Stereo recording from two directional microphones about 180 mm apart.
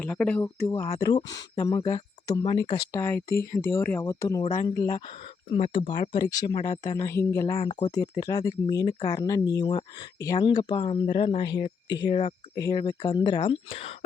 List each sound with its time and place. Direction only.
0.0 s speech: 5° left (ahead or behind)
4.4 s speech: 35° left (ahead or behind); by 7.5 s 15° left (ahead or behind)
7.5 s speech: 30° left (ahead or behind)